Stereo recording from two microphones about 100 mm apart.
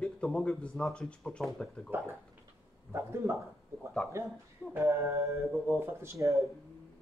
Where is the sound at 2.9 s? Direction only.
30° right (ahead or behind).